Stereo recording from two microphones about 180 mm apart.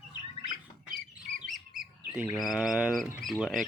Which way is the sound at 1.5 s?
5° right (ahead or behind).